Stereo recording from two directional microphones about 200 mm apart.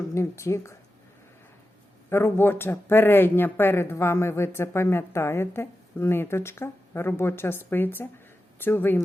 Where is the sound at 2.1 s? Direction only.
10° left (ahead or behind).